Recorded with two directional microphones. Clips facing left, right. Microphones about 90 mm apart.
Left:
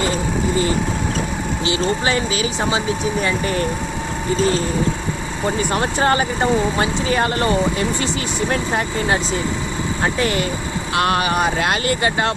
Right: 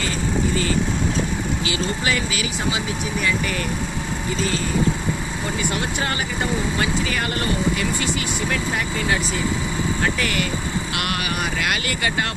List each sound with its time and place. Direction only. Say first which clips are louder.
1.6 s speech: left 7 dB; 30° left (ahead or behind)
5.5 s speech: left 6 dB; 40° left (ahead or behind)